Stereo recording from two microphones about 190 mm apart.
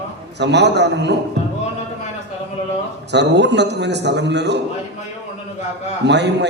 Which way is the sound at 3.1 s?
65° right (ahead or behind).